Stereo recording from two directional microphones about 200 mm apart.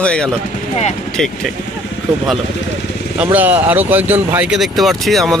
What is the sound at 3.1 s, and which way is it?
Speech, 10° right (ahead or behind).